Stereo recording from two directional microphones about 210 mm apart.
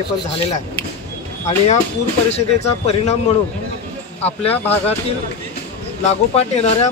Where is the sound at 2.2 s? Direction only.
30° left (ahead or behind).